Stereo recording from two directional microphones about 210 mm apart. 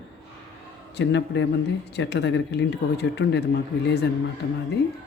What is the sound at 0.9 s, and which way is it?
Speech, 60° left (ahead or behind).